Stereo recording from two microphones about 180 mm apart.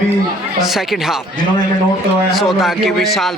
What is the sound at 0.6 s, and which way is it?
Speech, centre (ahead or behind).